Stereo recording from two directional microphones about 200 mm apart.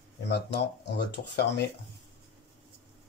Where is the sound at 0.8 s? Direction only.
55° left (ahead or behind).